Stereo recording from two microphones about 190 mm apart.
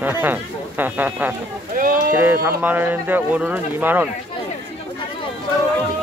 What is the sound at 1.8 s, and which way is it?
Speech, 45° right (ahead or behind).